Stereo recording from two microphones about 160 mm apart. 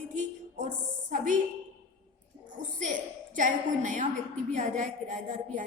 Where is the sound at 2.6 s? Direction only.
50° right (ahead or behind).